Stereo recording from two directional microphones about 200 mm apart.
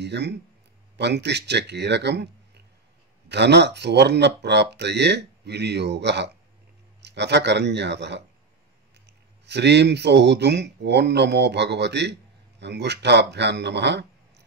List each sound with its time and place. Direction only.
0.0 s speech: 55° right (ahead or behind)